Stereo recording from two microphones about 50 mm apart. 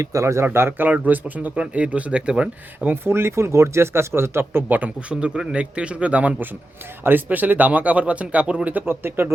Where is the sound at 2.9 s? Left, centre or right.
Right.